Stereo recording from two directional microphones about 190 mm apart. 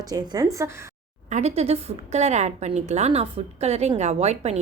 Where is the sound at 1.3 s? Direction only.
35° right (ahead or behind).